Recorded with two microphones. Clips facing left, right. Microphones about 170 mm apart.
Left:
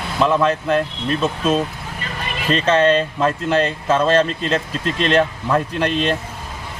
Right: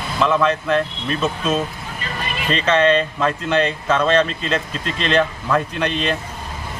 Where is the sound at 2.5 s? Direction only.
35° left (ahead or behind).